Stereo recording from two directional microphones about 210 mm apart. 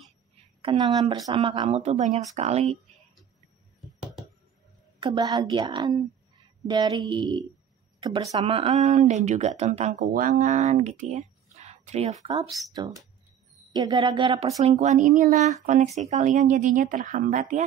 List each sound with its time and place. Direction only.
0.6 s speech: 20° right (ahead or behind)
5.0 s speech: 20° right (ahead or behind)
12.4 s speech: centre (ahead or behind)
13.7 s speech: 20° right (ahead or behind); by 17.6 s 35° right (ahead or behind)